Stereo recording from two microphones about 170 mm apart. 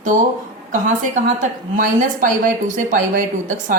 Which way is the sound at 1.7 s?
50° right (ahead or behind).